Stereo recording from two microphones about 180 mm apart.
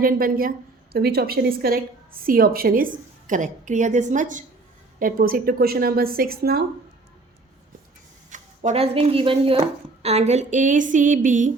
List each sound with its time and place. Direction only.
0.0 s a woman's voice: 50° right (ahead or behind)
8.3 s speech: 40° right (ahead or behind)